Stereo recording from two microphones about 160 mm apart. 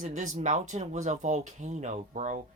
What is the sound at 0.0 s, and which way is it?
Speech, 50° right (ahead or behind).